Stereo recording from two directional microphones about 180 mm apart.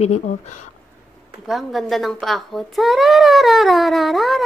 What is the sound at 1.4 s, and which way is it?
A child's voice, centre (ahead or behind).